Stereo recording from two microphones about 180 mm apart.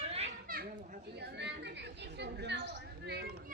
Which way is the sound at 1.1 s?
65° right (ahead or behind).